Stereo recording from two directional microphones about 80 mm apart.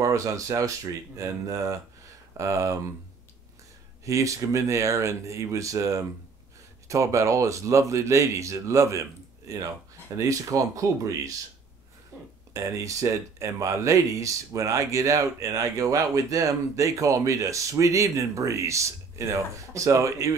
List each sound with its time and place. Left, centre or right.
0.0 s speech: right
4.0 s speech: right
10.1 s speech: right
12.5 s speech: right